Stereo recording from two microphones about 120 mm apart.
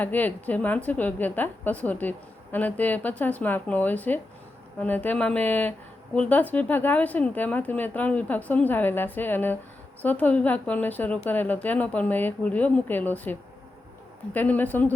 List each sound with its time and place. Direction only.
0.0 s a woman's voice: 15° left (ahead or behind)
14.3 s a woman's voice: 15° left (ahead or behind)